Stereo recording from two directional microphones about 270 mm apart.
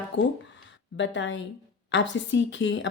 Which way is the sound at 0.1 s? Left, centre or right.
Left.